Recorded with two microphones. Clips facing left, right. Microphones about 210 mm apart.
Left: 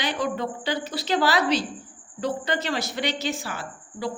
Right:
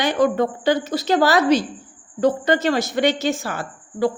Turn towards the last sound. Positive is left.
turn(degrees=-50)  # may be behind; listen again after turning